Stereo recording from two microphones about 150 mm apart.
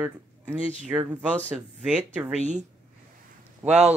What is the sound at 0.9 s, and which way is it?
Speech, 10° right (ahead or behind).